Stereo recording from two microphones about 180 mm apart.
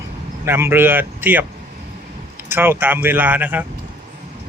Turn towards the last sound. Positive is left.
turn(degrees=-10)  # may be behind; listen again after turning